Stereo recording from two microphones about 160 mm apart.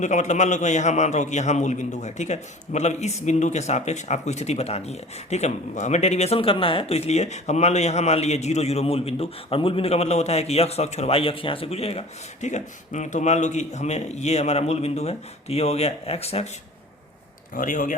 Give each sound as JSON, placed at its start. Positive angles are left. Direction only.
{"t": 0.0, "sound": "speech", "side_deg": 50}
{"t": 17.5, "sound": "speech", "side_deg": 55}